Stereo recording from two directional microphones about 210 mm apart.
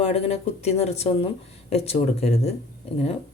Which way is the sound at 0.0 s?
30° left (ahead or behind).